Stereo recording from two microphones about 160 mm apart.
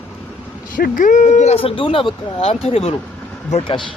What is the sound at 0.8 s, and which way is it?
Speech, 55° left (ahead or behind).